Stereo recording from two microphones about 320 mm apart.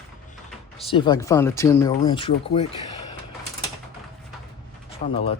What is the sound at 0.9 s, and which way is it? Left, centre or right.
Speech, centre.